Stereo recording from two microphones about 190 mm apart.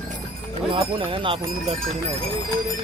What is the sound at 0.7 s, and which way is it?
Speech, 25° right (ahead or behind).